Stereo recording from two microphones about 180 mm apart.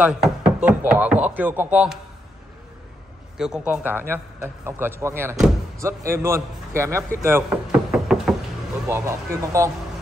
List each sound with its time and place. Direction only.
0.0 s speech: 5° right (ahead or behind)
3.3 s a man's voice: 5° right (ahead or behind)
7.9 s knock: centre (ahead or behind)
8.8 s speech: 15° right (ahead or behind)